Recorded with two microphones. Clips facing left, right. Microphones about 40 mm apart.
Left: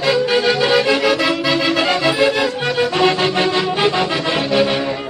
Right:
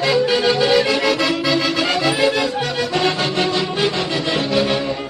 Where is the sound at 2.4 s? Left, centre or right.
Left.